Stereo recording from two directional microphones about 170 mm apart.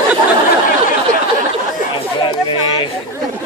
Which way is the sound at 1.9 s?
30° left (ahead or behind).